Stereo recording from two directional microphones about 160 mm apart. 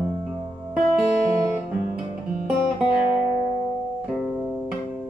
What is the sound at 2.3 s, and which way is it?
Music, 5° right (ahead or behind).